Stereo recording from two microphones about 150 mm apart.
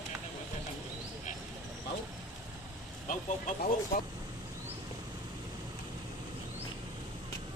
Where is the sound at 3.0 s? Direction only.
55° left (ahead or behind).